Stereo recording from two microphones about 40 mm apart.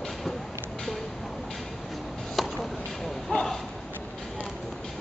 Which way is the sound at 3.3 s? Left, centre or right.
Left.